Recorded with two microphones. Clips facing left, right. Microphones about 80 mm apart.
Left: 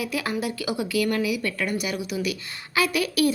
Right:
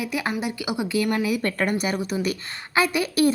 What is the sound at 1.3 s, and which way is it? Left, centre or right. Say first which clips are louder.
A woman's voice: right 3 dB; right.